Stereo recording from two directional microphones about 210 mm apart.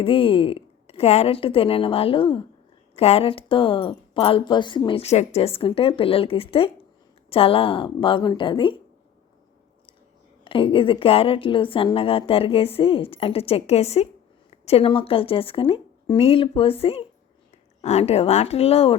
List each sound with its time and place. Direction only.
0.0 s speech: 25° left (ahead or behind)
10.4 s speech: 25° left (ahead or behind)
17.8 s speech: 30° left (ahead or behind)